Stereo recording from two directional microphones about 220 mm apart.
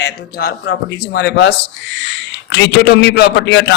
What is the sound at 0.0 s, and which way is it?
A man's voice, 50° left (ahead or behind).